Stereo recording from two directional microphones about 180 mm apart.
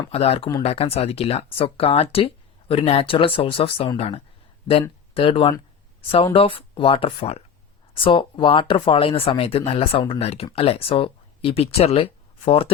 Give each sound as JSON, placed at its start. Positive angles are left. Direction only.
{"t": 0.1, "sound": "speech", "side_deg": 35}